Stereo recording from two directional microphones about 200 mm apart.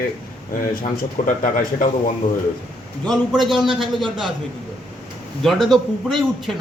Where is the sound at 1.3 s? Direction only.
40° left (ahead or behind).